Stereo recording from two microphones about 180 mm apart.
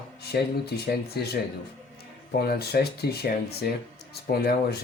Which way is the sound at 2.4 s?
60° left (ahead or behind).